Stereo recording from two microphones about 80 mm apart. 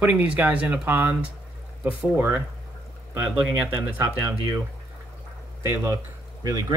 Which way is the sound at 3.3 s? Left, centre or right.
Centre.